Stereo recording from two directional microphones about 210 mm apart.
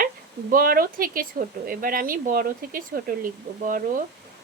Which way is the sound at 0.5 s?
45° right (ahead or behind).